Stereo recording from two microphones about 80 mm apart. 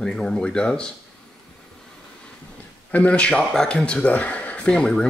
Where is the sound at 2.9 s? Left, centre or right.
Centre.